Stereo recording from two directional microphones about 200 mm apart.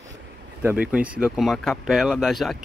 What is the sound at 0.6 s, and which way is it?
Speech, 10° right (ahead or behind).